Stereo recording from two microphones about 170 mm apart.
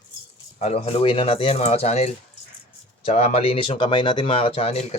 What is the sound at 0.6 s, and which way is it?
Speech, 40° left (ahead or behind).